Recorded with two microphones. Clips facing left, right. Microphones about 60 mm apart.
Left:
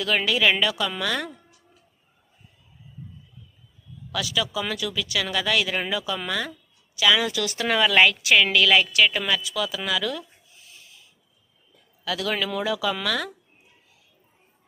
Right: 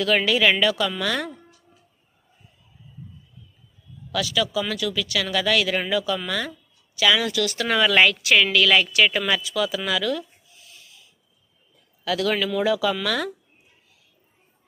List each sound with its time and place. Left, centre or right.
0.0 s speech: centre
4.1 s a woman's voice: centre
7.2 s speech: left
7.7 s speech: centre
10.5 s a sound: left
12.0 s speech: centre